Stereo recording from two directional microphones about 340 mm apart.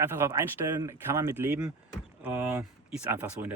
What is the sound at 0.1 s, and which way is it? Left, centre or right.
Speech, centre.